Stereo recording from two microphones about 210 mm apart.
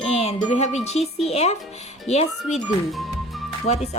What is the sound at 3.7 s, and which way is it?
Music, 35° left (ahead or behind).